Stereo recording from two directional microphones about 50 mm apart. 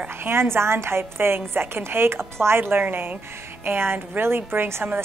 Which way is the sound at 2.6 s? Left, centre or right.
Right.